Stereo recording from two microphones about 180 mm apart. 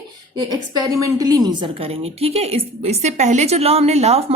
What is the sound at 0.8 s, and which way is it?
A woman's voice, 20° right (ahead or behind).